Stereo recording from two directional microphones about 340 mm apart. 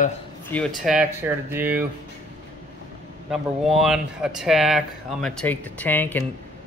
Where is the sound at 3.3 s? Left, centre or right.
Centre.